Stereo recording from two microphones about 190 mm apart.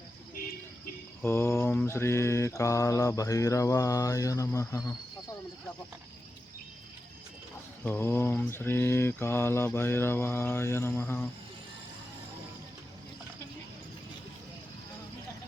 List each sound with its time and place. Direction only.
1.2 s mantra: 15° left (ahead or behind)
7.9 s mantra: 10° left (ahead or behind)